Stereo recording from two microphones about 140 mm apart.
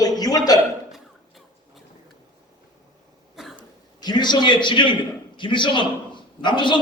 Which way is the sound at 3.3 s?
Centre (ahead or behind).